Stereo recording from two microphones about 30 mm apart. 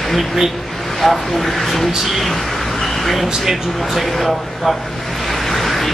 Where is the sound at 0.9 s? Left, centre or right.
Centre.